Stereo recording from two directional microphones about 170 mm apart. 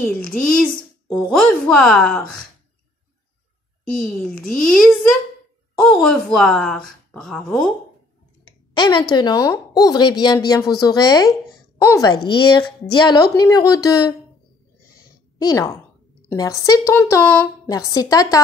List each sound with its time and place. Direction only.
0.0 s a child's voice: 5° left (ahead or behind)
4.0 s a child's voice: 5° left (ahead or behind)
8.5 s clicking: 25° left (ahead or behind)
9.1 s speech: 25° left (ahead or behind)
15.0 s a sound: 20° left (ahead or behind)
16.3 s a woman's voice: 20° left (ahead or behind)